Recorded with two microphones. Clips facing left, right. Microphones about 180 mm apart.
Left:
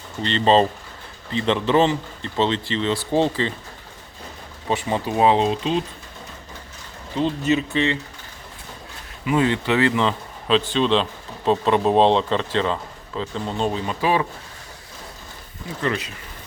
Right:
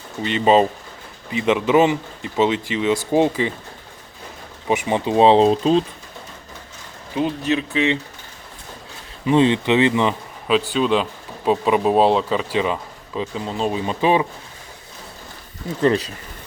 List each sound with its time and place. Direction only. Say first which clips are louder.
0.2 s speech: right 2 dB; 10° right (ahead or behind)
4.7 s speech: right 4 dB; 20° right (ahead or behind); by 5.8 s 35° right (ahead or behind)
7.4 s speech: even; centre (ahead or behind)
9.2 s speech: right 4 dB; 25° right (ahead or behind); by 13.8 s 5° right (ahead or behind)
13.8 s speech: right 6 dB; 20° right (ahead or behind)
15.8 s speech: right 7 dB; 35° right (ahead or behind)